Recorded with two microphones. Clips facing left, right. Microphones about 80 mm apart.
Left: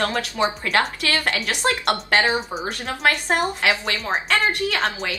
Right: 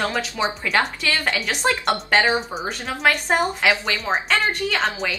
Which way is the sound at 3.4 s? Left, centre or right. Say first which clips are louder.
Right 1 dB; centre.